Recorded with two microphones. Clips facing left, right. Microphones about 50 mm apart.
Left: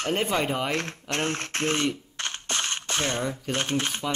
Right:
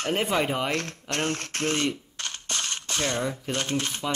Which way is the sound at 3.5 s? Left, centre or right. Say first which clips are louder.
Left 3 dB; left.